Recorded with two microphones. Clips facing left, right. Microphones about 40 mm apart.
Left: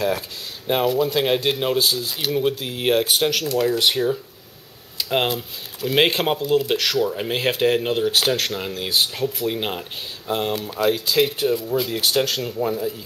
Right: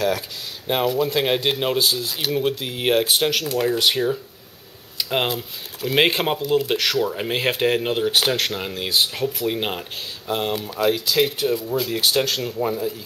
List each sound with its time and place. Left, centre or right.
0.7 s speech: centre